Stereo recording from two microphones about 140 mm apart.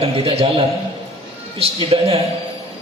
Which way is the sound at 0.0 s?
45° right (ahead or behind).